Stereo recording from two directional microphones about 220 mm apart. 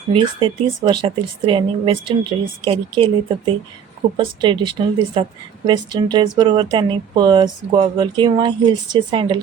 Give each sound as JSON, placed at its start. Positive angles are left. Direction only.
{"t": 0.1, "sound": "speech", "side_deg": -20}